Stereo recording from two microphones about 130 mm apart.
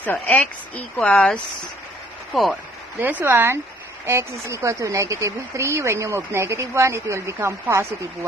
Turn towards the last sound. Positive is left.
turn(degrees=-20)  # may be behind; listen again after turning